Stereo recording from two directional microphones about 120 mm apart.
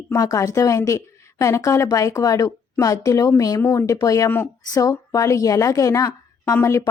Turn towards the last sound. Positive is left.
turn(degrees=25)  # may be behind; listen again after turning